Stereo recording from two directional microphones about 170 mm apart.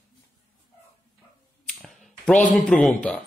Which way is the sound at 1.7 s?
5° left (ahead or behind).